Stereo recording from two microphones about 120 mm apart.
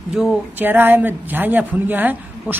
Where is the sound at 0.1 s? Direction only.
5° right (ahead or behind).